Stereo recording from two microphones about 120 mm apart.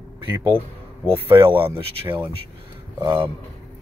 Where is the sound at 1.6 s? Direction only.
15° right (ahead or behind).